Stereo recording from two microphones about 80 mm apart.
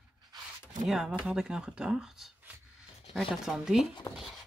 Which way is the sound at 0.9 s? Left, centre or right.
Centre.